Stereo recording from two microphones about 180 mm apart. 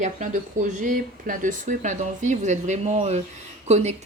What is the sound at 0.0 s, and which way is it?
Speech, 40° right (ahead or behind).